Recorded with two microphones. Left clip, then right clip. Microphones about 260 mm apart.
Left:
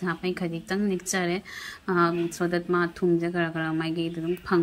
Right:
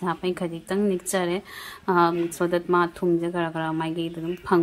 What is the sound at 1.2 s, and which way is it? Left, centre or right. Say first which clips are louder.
Speech: right 2 dB; centre.